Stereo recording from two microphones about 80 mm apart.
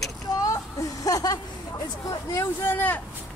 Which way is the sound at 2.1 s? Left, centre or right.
Left.